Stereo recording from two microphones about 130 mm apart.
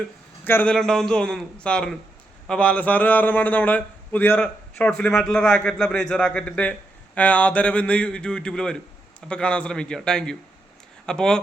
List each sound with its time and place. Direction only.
0.4 s speech: 15° left (ahead or behind)
0.7 s a man's voice: 5° left (ahead or behind)